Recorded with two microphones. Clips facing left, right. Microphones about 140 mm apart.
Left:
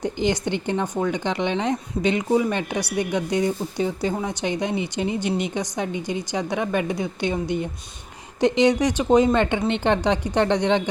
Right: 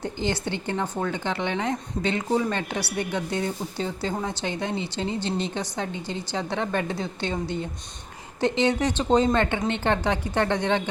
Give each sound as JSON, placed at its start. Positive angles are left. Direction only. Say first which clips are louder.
{"t": 0.0, "sound": "a woman's voice", "louder": "left 5 dB", "side_deg": 15}